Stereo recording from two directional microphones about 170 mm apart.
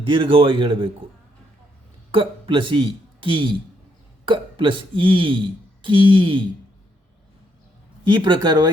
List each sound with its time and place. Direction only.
0.0 s a man's voice: 30° right (ahead or behind)
2.1 s speech: 30° right (ahead or behind)
8.1 s speech: 25° right (ahead or behind)